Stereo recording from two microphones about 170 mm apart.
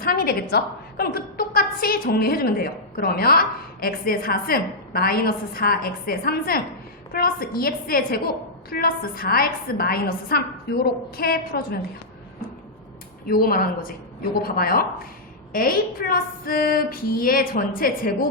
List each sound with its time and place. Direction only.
0.0 s a woman's voice: 65° left (ahead or behind)
13.2 s a woman's voice: 60° left (ahead or behind)